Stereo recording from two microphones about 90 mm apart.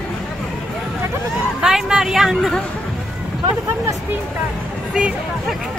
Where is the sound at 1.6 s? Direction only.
5° right (ahead or behind).